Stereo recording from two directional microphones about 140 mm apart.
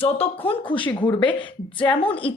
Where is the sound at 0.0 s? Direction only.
40° left (ahead or behind).